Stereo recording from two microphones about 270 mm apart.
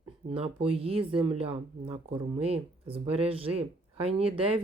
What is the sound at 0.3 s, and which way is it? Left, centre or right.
Speech, right.